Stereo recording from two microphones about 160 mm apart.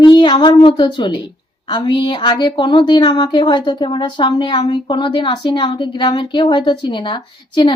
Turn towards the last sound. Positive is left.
turn(degrees=30)  # may be behind; listen again after turning